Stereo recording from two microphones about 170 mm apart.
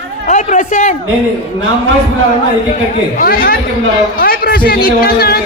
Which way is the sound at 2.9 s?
50° left (ahead or behind).